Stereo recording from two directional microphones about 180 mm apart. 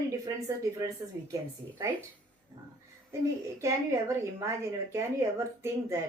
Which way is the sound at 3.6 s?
15° right (ahead or behind).